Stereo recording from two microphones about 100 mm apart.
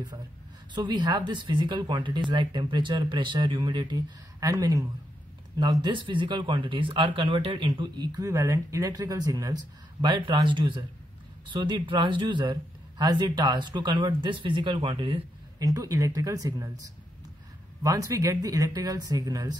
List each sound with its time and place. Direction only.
0.7 s a man's voice: 50° right (ahead or behind)
5.6 s a man's voice: 45° right (ahead or behind)
8.2 s speech: 30° right (ahead or behind)
10.0 s a man's voice: 50° right (ahead or behind)
15.6 s speech: 35° right (ahead or behind)
17.8 s speech: 35° right (ahead or behind)